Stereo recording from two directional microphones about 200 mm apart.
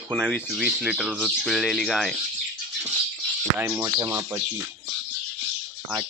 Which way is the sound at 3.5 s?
15° right (ahead or behind).